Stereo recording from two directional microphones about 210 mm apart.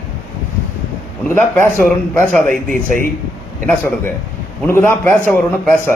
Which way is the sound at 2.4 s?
40° right (ahead or behind).